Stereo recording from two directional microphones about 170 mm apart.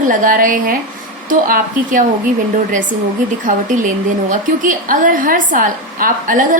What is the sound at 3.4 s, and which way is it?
A woman's voice, 50° right (ahead or behind).